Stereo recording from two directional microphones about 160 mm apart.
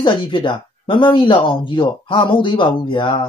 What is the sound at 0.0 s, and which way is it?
Speech, 30° left (ahead or behind).